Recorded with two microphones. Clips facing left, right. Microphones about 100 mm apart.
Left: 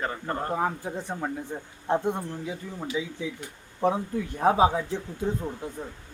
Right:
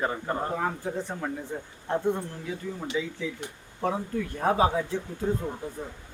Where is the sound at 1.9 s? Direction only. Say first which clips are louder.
Left 1 dB; 20° left (ahead or behind).